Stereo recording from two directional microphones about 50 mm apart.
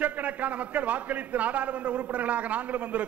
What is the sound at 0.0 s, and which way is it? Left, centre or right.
A man's voice, right.